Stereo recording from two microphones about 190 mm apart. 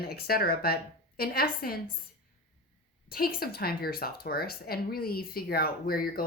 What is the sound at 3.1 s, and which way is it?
Speech, 50° left (ahead or behind).